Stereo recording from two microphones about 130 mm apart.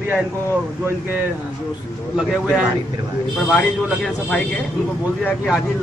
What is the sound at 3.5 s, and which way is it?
A man's voice, 5° left (ahead or behind).